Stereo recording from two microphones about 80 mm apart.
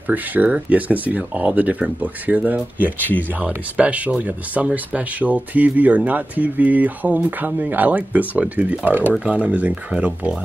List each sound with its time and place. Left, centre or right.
0.1 s speech: right